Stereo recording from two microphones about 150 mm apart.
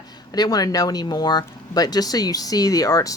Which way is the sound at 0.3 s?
25° left (ahead or behind).